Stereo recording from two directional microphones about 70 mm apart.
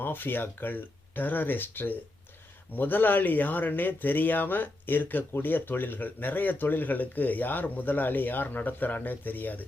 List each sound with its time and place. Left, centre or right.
0.0 s speech: left